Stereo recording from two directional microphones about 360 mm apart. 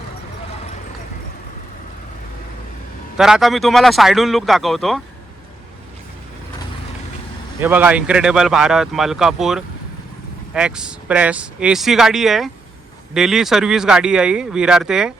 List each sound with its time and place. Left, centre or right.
3.2 s speech: centre
7.6 s speech: centre